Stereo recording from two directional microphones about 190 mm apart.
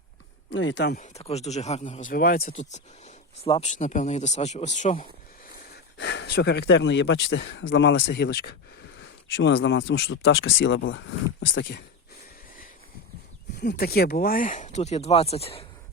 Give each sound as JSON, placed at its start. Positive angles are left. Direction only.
{"t": 0.5, "sound": "speech", "side_deg": 75}
{"t": 0.9, "sound": "speech", "side_deg": 35}
{"t": 5.7, "sound": "speech", "side_deg": 65}
{"t": 13.6, "sound": "speech", "side_deg": 60}